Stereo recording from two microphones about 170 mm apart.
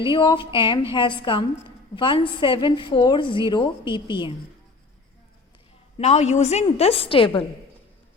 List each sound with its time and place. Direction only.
0.1 s a woman's voice: 30° left (ahead or behind)
6.0 s a woman's voice: 40° left (ahead or behind)